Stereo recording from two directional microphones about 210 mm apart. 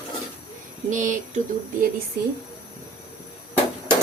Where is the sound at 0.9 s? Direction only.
35° right (ahead or behind).